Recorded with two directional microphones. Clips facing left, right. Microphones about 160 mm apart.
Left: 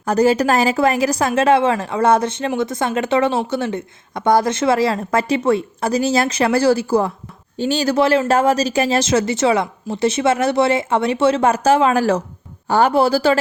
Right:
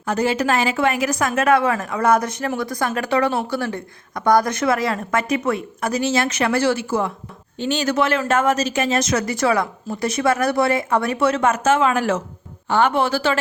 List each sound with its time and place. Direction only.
0.0 s a woman's voice: 40° left (ahead or behind)